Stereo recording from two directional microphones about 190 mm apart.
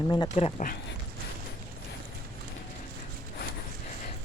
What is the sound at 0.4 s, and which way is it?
Speech, 30° left (ahead or behind).